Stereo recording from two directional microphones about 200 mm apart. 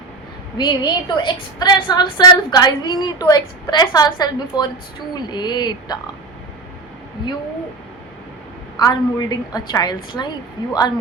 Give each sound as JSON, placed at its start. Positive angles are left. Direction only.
{"t": 0.5, "sound": "a woman's voice", "side_deg": 20}
{"t": 8.8, "sound": "a woman's voice", "side_deg": 20}